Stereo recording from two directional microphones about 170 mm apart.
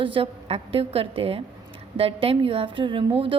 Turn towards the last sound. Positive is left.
turn(degrees=-30)  # may be behind; listen again after turning